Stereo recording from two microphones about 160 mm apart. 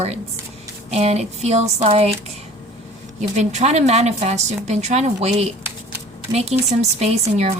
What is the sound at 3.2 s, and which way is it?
Speech, 45° right (ahead or behind).